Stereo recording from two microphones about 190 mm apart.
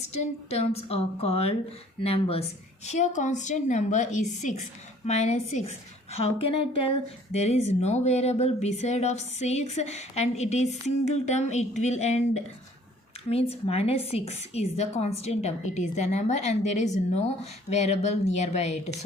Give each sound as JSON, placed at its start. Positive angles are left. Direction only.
{"t": 0.1, "sound": "speech", "side_deg": 35}